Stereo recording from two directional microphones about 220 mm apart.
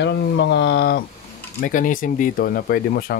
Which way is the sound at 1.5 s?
35° left (ahead or behind).